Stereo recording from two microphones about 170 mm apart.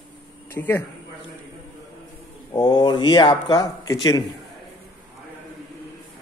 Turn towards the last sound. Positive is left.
turn(degrees=25)  # may be behind; listen again after turning